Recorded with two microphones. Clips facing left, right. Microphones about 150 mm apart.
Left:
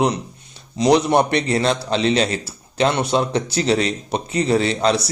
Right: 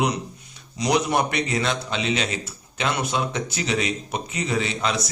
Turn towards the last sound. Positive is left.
turn(degrees=30)  # may be behind; listen again after turning